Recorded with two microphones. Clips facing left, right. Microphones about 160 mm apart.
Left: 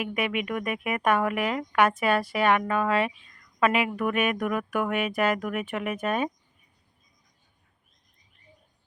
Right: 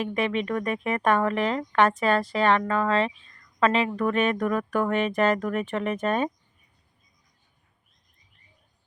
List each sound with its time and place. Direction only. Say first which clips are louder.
0.2 s speech: right 3 dB; 10° left (ahead or behind)